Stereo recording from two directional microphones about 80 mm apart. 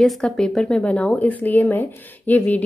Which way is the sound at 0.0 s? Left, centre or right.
Centre.